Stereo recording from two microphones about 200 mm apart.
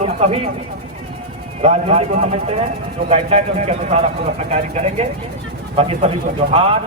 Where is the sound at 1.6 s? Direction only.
35° right (ahead or behind).